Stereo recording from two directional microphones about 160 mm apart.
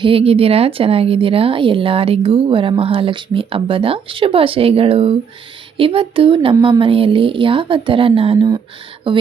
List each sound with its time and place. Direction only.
0.0 s speech: 35° right (ahead or behind)